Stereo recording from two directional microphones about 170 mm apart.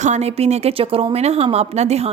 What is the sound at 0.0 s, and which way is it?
A woman's voice, 40° right (ahead or behind).